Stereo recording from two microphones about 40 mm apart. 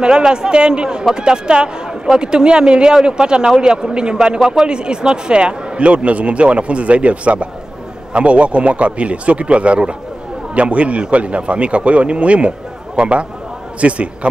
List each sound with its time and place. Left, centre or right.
0.0 s speech: right